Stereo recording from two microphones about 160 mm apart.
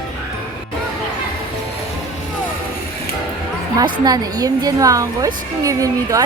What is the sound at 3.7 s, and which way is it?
A woman's voice, 25° right (ahead or behind).